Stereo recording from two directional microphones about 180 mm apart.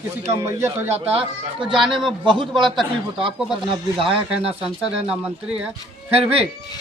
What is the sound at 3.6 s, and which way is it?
Speech, 30° right (ahead or behind).